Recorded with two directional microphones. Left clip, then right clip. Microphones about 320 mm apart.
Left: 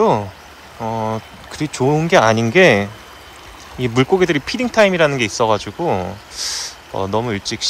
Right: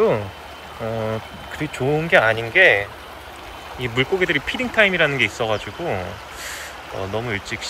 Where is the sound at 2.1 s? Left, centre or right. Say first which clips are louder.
Left 2 dB; centre.